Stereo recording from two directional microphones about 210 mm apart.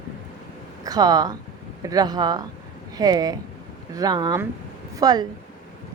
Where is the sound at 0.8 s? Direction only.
20° right (ahead or behind).